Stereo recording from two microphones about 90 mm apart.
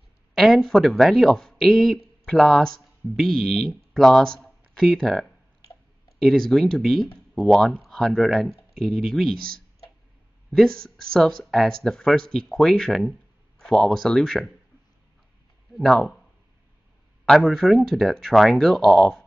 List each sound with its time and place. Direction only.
0.3 s speech: centre (ahead or behind)
10.5 s speech: 5° left (ahead or behind)
15.7 s speech: centre (ahead or behind)
17.3 s speech: centre (ahead or behind)